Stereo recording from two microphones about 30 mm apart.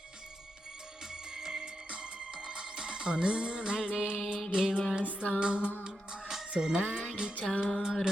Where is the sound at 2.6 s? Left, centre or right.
Right.